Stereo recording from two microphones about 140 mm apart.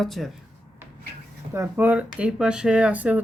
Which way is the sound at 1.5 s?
20° right (ahead or behind).